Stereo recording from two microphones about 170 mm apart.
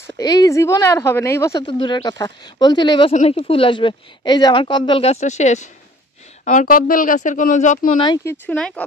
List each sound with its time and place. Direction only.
0.0 s a woman's voice: 20° left (ahead or behind)
3.1 s speech: 35° left (ahead or behind)
8.0 s a woman's voice: 25° left (ahead or behind)
8.3 s speech: 5° left (ahead or behind)